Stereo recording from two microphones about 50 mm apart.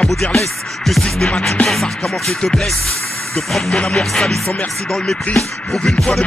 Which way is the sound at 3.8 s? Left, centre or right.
Centre.